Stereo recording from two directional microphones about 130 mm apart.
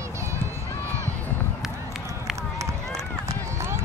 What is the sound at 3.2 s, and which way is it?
Run, 20° right (ahead or behind).